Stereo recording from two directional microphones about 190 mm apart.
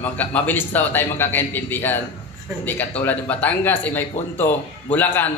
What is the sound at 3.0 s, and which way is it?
Speech, 10° left (ahead or behind).